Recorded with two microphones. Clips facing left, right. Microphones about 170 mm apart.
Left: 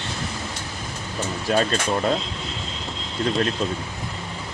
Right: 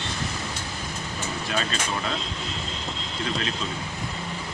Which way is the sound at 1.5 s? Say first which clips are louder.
Left 9 dB; 40° left (ahead or behind).